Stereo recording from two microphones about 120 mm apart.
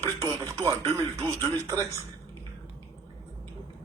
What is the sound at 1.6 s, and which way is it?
Speech, 30° right (ahead or behind).